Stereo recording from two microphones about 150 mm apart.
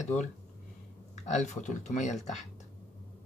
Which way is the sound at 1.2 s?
50° left (ahead or behind).